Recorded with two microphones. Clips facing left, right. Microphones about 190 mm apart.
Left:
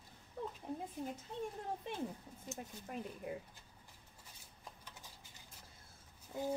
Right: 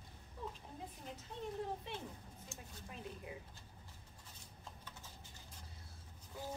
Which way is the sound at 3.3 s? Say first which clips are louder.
Left 6 dB; 50° left (ahead or behind).